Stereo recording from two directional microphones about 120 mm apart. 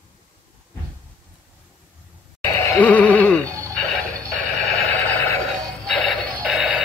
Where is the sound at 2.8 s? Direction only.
10° left (ahead or behind).